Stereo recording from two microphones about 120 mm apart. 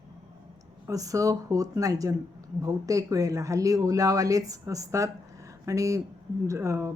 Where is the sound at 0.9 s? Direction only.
30° right (ahead or behind).